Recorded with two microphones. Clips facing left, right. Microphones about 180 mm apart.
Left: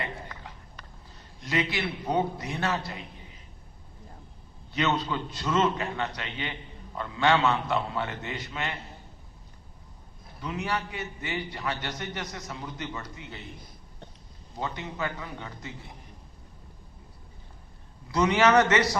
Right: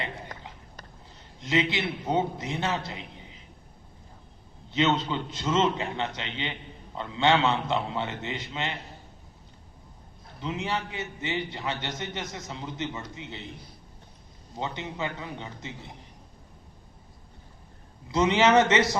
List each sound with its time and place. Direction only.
1.4 s a man's voice: 20° right (ahead or behind)
4.7 s a man's voice: 20° right (ahead or behind)
10.4 s a man's voice: 20° right (ahead or behind)
14.6 s a man's voice: 20° right (ahead or behind)
18.1 s a man's voice: 20° right (ahead or behind)